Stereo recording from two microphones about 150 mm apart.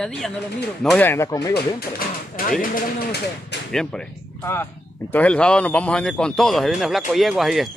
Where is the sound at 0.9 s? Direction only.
15° left (ahead or behind).